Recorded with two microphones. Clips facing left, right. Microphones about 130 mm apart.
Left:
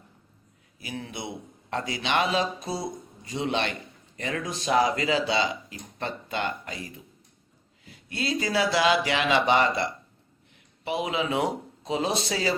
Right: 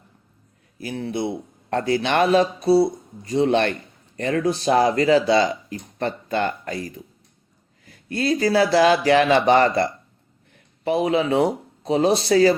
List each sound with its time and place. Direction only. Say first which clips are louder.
0.8 s speech: right 10 dB; 40° right (ahead or behind)
1.7 s speech: right 7 dB; 45° right (ahead or behind)
2.6 s speech: right 15 dB; 35° right (ahead or behind)
7.9 s speech: right 8 dB; 50° right (ahead or behind)
10.5 s a sound: right 8 dB; 45° right (ahead or behind)
11.9 s speech: right 9 dB; 40° right (ahead or behind)